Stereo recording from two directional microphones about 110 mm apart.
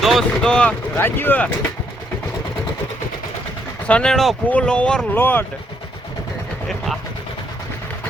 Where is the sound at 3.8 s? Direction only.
10° left (ahead or behind).